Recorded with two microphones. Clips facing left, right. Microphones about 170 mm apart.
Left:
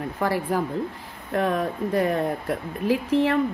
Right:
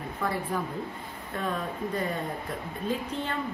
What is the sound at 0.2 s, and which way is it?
Speech, 80° left.